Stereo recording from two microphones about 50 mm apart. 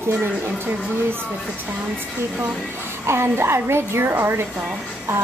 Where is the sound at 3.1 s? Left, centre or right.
Right.